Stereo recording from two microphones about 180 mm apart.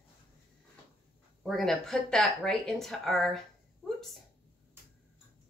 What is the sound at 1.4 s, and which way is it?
Speech, centre (ahead or behind).